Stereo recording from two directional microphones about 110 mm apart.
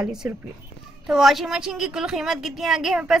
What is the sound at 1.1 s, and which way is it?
A woman's voice, centre (ahead or behind).